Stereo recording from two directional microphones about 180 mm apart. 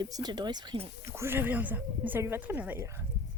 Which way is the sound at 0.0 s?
25° right (ahead or behind).